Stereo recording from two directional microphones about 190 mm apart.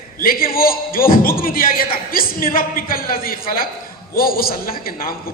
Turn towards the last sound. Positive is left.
turn(degrees=50)  # may be behind; listen again after turning